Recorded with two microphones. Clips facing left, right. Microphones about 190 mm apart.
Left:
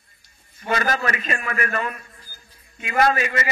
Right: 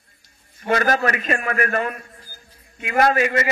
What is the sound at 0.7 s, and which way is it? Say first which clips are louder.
A man's voice: right 4 dB; 45° right (ahead or behind).